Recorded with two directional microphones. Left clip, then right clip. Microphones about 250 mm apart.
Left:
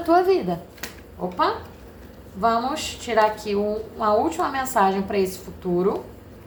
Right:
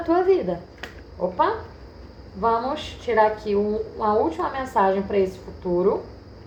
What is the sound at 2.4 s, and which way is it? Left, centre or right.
A woman's voice, left.